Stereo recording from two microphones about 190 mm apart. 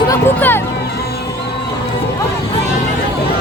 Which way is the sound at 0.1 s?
10° left (ahead or behind).